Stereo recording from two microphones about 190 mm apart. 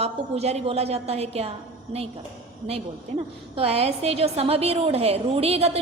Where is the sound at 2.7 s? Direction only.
30° right (ahead or behind).